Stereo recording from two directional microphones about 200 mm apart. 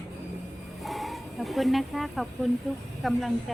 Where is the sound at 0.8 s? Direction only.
Centre (ahead or behind).